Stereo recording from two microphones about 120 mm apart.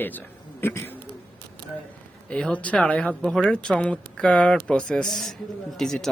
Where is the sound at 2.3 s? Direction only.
10° left (ahead or behind).